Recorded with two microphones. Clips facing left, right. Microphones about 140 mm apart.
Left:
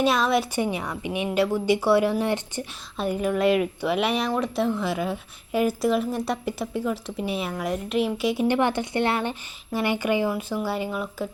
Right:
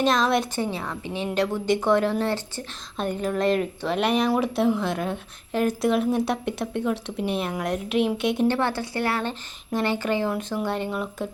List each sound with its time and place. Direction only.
0.0 s speech: 5° left (ahead or behind)
0.6 s a woman's voice: 15° left (ahead or behind)
8.4 s a woman's voice: 15° left (ahead or behind)